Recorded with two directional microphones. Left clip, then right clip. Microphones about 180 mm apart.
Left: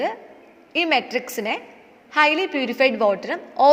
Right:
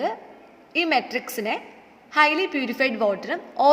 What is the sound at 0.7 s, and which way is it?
A woman's voice, 10° left (ahead or behind).